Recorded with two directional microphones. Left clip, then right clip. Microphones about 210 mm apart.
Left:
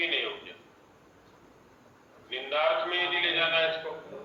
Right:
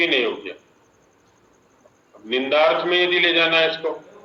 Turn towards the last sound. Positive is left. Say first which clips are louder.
# right 9 dB
turn(degrees=-55)  # may be behind; listen again after turning